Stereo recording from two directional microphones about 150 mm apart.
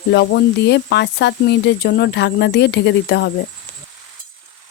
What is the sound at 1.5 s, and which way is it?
Speech, 90° left.